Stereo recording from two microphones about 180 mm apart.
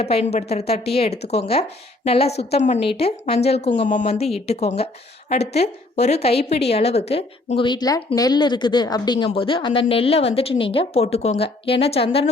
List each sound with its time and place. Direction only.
0.0 s a woman's voice: 35° left (ahead or behind)